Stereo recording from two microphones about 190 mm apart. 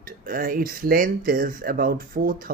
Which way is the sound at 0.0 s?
50° right (ahead or behind).